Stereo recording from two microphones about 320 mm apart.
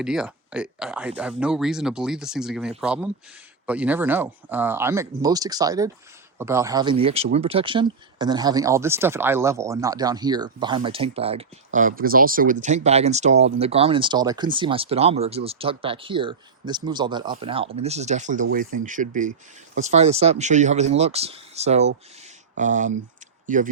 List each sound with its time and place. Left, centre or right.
0.0 s speech: centre; by 23.6 s right